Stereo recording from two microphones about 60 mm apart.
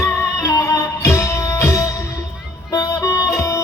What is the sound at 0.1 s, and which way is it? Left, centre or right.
Music, left.